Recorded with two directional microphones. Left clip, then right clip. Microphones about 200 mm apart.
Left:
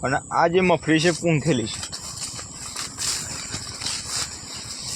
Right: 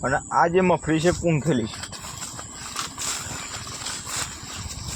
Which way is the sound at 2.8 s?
55° right (ahead or behind).